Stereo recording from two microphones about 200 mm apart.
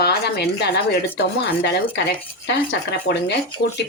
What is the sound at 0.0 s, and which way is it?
Speech, 55° left (ahead or behind).